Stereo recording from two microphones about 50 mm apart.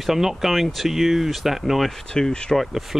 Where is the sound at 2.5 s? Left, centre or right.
Centre.